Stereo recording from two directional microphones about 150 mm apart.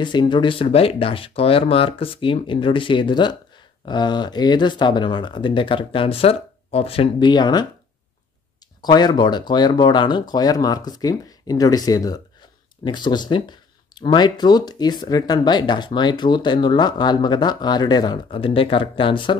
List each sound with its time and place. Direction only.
0.0 s speech: 30° left (ahead or behind)
8.8 s speech: 30° left (ahead or behind)